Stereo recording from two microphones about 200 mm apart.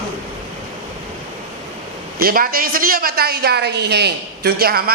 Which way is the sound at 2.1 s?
45° right (ahead or behind).